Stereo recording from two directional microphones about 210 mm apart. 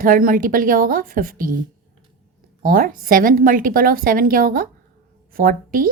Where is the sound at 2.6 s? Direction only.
45° right (ahead or behind).